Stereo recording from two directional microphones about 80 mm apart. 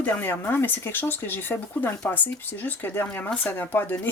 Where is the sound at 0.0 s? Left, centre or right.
Left.